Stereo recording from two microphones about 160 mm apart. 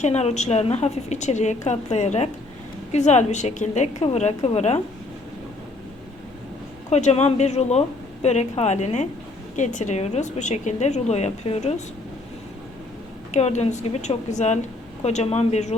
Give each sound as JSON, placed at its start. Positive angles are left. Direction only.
{"t": 0.0, "sound": "a woman's voice", "side_deg": 40}
{"t": 6.9, "sound": "a woman's voice", "side_deg": 40}
{"t": 13.3, "sound": "a woman's voice", "side_deg": 45}